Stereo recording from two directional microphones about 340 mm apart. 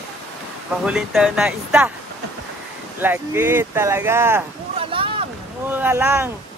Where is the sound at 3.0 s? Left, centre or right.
Centre.